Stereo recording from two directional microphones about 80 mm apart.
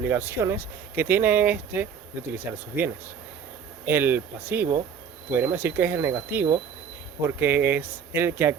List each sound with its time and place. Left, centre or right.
0.0 s speech: right